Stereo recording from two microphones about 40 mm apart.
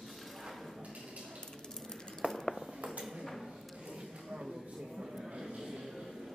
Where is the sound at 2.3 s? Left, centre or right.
Centre.